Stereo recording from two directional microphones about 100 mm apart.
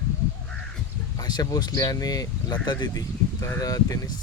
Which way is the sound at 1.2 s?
40° left (ahead or behind).